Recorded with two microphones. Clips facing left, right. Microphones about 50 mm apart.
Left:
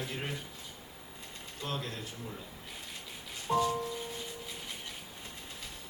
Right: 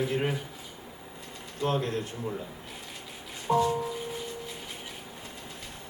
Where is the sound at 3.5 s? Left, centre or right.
Centre.